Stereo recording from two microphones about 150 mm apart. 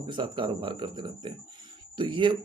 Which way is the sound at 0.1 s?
35° right (ahead or behind).